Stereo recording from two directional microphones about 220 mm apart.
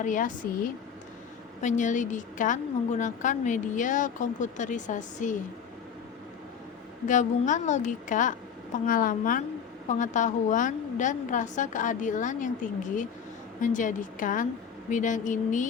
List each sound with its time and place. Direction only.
0.0 s a woman's voice: 35° left (ahead or behind)
7.1 s a woman's voice: 35° left (ahead or behind)